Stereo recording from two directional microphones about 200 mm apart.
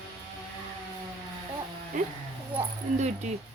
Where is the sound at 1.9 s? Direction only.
40° right (ahead or behind).